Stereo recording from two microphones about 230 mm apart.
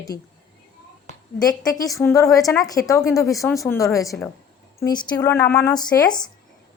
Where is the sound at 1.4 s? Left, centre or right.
Centre.